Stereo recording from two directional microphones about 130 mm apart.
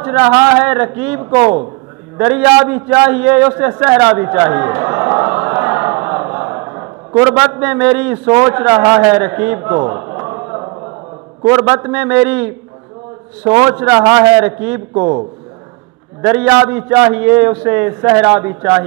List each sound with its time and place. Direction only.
0.0 s a man's voice: 15° right (ahead or behind)
2.1 s a sound: 15° right (ahead or behind)
7.3 s a man's voice: 15° right (ahead or behind)
10.7 s a sound: 25° right (ahead or behind)
11.4 s a man's voice: 20° right (ahead or behind)
13.5 s a man's voice: 25° right (ahead or behind)
16.2 s a man's voice: 15° right (ahead or behind)